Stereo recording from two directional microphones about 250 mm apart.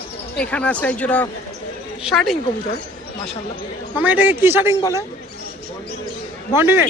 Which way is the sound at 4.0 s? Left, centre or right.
Centre.